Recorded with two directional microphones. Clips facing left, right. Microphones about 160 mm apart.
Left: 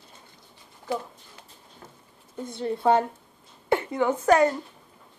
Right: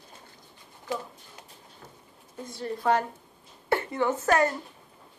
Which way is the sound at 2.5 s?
25° left (ahead or behind).